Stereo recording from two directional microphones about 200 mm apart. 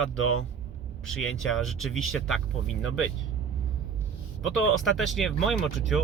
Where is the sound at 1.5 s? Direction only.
Centre (ahead or behind).